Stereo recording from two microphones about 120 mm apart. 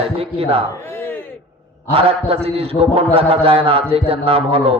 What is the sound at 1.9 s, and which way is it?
A man's voice, 55° right (ahead or behind).